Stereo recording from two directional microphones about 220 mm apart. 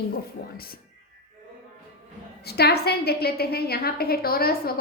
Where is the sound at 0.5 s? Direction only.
45° left (ahead or behind).